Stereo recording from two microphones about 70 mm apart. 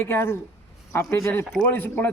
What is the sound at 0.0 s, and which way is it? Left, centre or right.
Speech, left.